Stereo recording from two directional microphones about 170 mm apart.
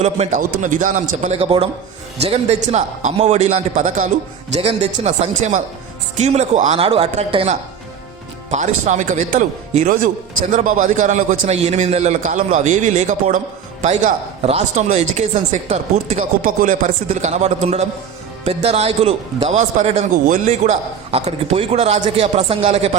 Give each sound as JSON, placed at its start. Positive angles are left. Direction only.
{"t": 0.0, "sound": "a man's voice", "side_deg": -45}